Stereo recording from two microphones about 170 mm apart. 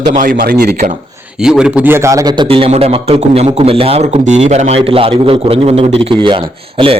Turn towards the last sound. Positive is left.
turn(degrees=-30)  # may be behind; listen again after turning